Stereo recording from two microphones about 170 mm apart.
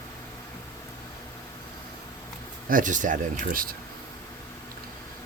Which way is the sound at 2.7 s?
50° right (ahead or behind).